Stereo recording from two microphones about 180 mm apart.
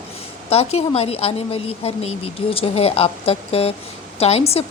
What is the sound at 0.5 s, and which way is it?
A woman's voice, 35° left (ahead or behind).